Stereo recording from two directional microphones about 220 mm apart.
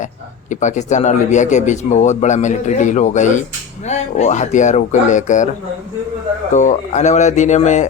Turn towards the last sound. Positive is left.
turn(degrees=35)  # may be behind; listen again after turning